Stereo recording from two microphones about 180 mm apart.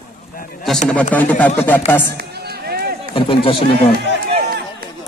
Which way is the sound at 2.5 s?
60° right (ahead or behind).